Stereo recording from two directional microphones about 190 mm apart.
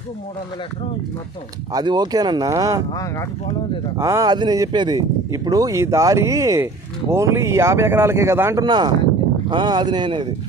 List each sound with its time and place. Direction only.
1.7 s speech: 20° right (ahead or behind)
2.9 s speech: 15° left (ahead or behind)
4.0 s speech: 15° right (ahead or behind)